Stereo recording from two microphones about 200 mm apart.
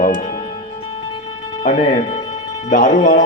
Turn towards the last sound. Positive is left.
turn(degrees=40)  # may be behind; listen again after turning